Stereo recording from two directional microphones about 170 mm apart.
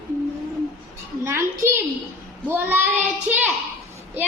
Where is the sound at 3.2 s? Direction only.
10° right (ahead or behind).